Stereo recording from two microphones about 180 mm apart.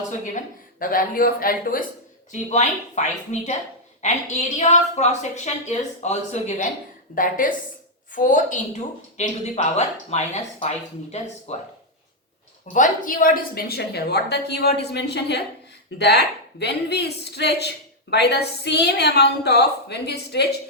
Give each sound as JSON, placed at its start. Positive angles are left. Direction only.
{"t": 0.3, "sound": "speech", "side_deg": 50}
{"t": 2.3, "sound": "a woman's voice", "side_deg": 40}
{"t": 12.7, "sound": "a woman's voice", "side_deg": 45}